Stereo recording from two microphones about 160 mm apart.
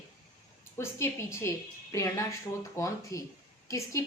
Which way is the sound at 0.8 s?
15° left (ahead or behind).